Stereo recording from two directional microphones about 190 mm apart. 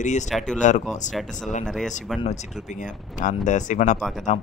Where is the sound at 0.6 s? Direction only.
40° left (ahead or behind).